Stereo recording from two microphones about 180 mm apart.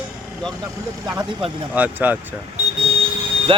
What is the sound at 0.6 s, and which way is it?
Speech, 20° right (ahead or behind).